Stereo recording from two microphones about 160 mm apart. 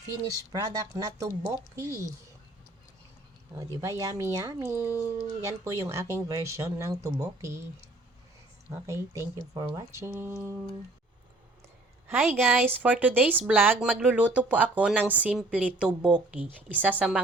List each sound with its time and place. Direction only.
0.1 s speech: 25° right (ahead or behind)
3.8 s speech: 20° right (ahead or behind)
8.9 s speech: 20° right (ahead or behind)
12.2 s a woman's voice: 10° right (ahead or behind)